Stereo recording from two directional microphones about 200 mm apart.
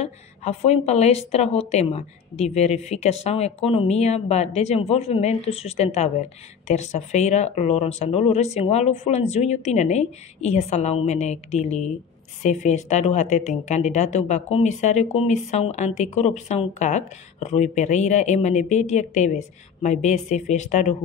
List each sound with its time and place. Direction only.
0.0 s speech: 30° left (ahead or behind)